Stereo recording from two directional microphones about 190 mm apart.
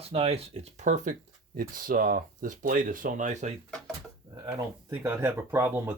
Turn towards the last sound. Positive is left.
turn(degrees=-10)  # may be behind; listen again after turning